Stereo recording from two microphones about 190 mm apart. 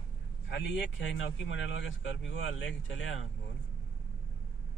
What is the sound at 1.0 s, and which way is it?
Speech, 80° left.